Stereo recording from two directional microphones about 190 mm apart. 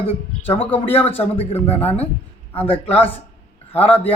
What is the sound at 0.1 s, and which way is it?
A man's voice, 30° left (ahead or behind).